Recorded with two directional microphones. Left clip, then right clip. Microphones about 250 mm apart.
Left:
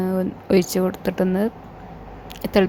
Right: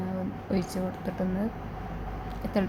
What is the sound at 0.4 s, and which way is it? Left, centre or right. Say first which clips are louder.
A woman's voice: left 14 dB; left.